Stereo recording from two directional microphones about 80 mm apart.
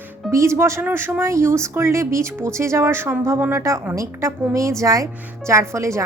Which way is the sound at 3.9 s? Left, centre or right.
Right.